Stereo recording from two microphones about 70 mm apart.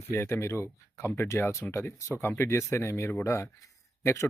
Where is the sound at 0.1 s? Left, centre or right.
Left.